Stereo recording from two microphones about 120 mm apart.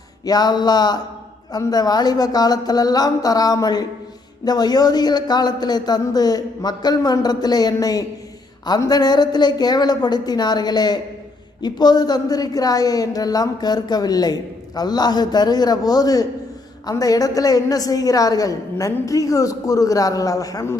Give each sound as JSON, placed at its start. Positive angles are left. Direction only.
{"t": 0.3, "sound": "a woman's voice", "side_deg": 35}